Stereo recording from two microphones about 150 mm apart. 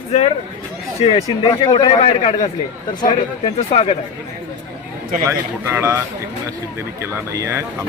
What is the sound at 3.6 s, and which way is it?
Speech, 45° left (ahead or behind).